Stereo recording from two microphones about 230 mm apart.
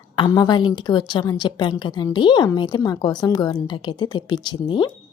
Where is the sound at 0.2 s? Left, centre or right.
Centre.